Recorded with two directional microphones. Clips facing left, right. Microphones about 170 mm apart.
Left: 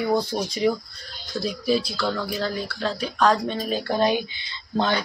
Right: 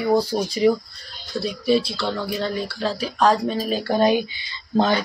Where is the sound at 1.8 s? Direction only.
25° right (ahead or behind).